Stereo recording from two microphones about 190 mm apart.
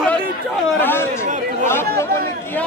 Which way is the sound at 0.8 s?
10° left (ahead or behind).